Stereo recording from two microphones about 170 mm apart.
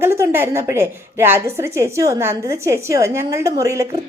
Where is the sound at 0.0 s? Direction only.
15° right (ahead or behind).